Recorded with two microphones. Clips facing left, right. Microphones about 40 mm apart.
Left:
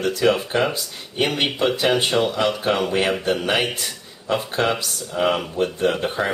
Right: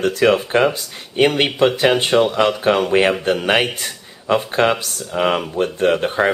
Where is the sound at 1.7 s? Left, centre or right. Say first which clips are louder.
Right 4 dB; right.